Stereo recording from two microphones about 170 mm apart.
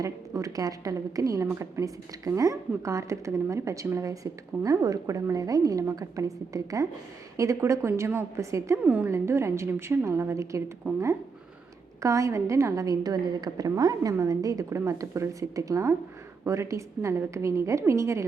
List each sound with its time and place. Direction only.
0.0 s a woman's voice: 20° right (ahead or behind)
12.0 s a woman's voice: 15° right (ahead or behind)